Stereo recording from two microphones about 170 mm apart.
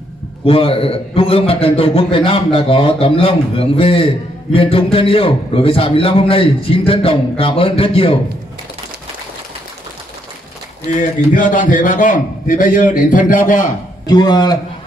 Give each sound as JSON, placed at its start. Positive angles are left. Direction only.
{"t": 0.5, "sound": "a man's voice", "side_deg": 35}
{"t": 10.9, "sound": "a man's voice", "side_deg": 50}
{"t": 14.0, "sound": "a man's voice", "side_deg": 25}